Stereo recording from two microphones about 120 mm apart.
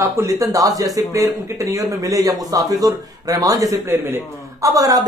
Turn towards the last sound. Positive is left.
turn(degrees=-30)  # may be behind; listen again after turning